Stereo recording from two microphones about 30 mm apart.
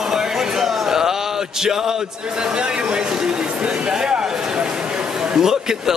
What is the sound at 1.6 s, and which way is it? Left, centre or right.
Speech, centre.